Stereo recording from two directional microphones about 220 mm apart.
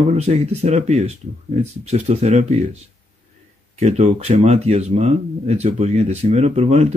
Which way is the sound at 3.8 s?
30° right (ahead or behind).